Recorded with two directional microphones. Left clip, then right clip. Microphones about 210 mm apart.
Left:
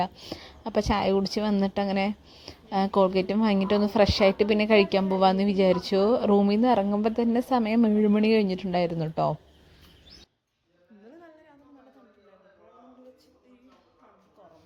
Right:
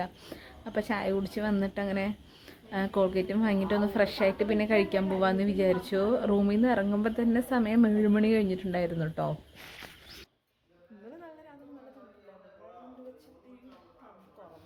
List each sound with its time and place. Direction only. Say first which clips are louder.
0.3 s a woman's voice: left 6 dB; 30° left (ahead or behind)